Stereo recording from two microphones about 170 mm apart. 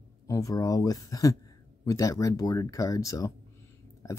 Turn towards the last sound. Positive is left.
turn(degrees=20)  # may be behind; listen again after turning